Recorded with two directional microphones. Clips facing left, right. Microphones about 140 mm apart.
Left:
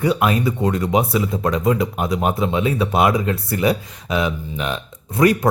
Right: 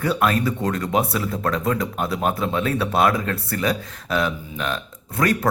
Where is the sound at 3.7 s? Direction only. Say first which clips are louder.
Left 2 dB; 5° left (ahead or behind).